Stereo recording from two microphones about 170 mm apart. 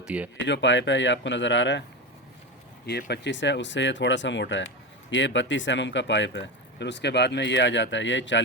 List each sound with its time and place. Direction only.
0.0 s speech: 10° right (ahead or behind)
0.4 s speech: 90° left
3.1 s speech: 90° left